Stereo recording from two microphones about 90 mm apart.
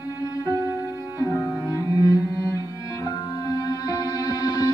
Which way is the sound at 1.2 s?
35° left (ahead or behind).